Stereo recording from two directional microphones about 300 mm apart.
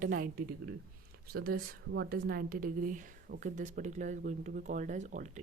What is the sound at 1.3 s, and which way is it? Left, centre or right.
A woman's voice, right.